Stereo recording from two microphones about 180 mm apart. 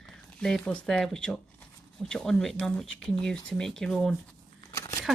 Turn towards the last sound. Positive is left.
turn(degrees=15)  # may be behind; listen again after turning